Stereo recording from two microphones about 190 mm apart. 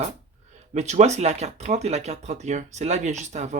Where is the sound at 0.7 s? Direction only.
35° right (ahead or behind).